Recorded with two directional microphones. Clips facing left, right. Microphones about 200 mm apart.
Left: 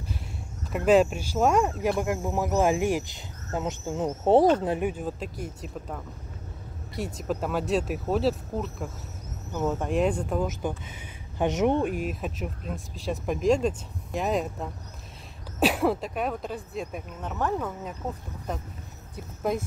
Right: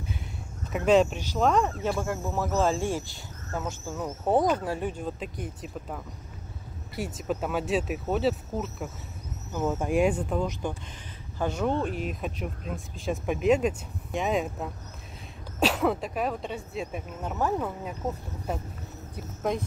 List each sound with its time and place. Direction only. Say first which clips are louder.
0.7 s speech: left 1 dB; 5° left (ahead or behind); by 4.7 s 30° left (ahead or behind)
4.7 s speech: left 3 dB; 10° left (ahead or behind)
10.6 s speech: left 2 dB; 5° left (ahead or behind)
11.3 s speech: left 4 dB; 20° left (ahead or behind)
12.1 s speech: left 1 dB; centre (ahead or behind)
15.8 s speech: left 1 dB; centre (ahead or behind)
19.5 s speech: left 1 dB; 5° left (ahead or behind)